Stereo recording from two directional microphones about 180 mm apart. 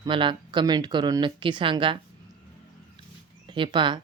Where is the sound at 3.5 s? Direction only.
25° right (ahead or behind).